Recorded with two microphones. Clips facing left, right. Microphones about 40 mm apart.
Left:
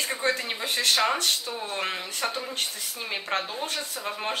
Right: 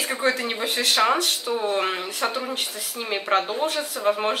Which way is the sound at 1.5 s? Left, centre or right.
Right.